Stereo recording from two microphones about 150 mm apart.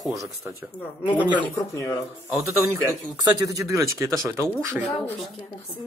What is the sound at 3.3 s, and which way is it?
Speech, 20° right (ahead or behind).